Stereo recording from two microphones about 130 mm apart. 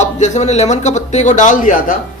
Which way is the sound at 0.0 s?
65° left (ahead or behind).